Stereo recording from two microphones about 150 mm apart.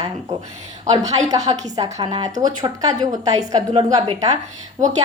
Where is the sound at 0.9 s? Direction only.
25° right (ahead or behind).